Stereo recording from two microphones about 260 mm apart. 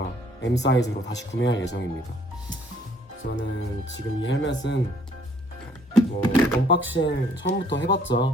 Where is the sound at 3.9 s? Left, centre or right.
Left.